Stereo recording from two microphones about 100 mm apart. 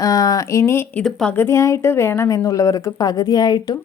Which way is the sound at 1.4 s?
25° left (ahead or behind).